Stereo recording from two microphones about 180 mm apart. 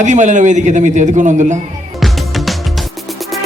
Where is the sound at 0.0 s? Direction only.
40° right (ahead or behind).